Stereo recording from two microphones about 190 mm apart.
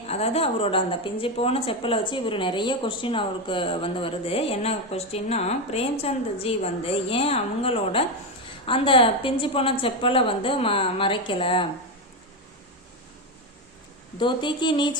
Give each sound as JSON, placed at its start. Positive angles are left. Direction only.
{"t": 0.1, "sound": "a woman's voice", "side_deg": 30}
{"t": 14.2, "sound": "a woman's voice", "side_deg": 25}